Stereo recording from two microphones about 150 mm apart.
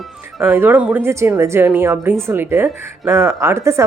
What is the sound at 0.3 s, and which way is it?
A woman's voice, 15° right (ahead or behind).